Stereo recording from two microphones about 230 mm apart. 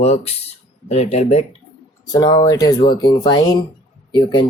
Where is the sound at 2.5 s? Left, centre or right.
Centre.